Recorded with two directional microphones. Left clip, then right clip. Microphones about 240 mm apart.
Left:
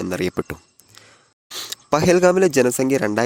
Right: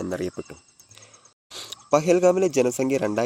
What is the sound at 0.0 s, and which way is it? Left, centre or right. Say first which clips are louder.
Speech: left 6 dB; left.